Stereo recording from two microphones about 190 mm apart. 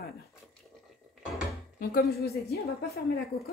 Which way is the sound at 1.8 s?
55° left (ahead or behind).